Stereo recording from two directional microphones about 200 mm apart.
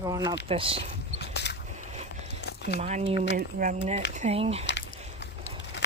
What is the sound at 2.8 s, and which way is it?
Speech, 35° right (ahead or behind).